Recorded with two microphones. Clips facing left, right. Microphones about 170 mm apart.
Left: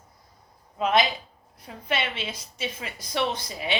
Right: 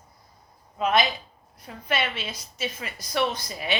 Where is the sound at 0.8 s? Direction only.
25° left (ahead or behind).